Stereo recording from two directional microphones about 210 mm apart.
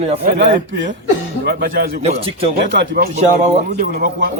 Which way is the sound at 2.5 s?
50° right (ahead or behind).